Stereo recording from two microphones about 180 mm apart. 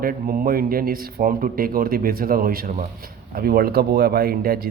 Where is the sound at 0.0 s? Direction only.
55° right (ahead or behind).